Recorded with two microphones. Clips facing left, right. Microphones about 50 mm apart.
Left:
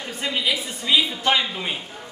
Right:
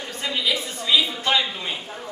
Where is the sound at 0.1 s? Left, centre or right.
Centre.